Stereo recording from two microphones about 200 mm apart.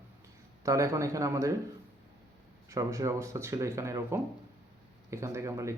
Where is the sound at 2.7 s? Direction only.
15° right (ahead or behind).